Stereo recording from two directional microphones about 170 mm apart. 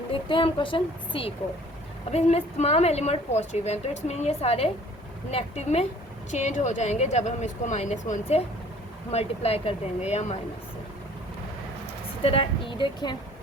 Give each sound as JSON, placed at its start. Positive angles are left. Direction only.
{"t": 0.1, "sound": "a woman's voice", "side_deg": 30}
{"t": 12.2, "sound": "a woman's voice", "side_deg": 35}